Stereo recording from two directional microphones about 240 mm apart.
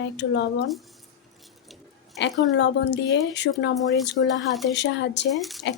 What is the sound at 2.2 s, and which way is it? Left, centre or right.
Speech, left.